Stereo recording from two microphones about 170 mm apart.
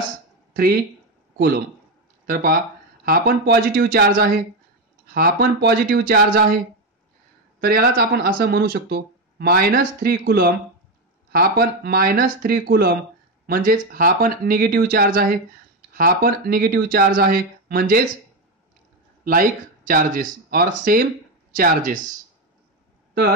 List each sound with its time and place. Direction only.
0.6 s speech: 60° right (ahead or behind)
2.2 s speech: 60° right (ahead or behind)
7.6 s speech: 65° right (ahead or behind)
19.2 s speech: 60° right (ahead or behind)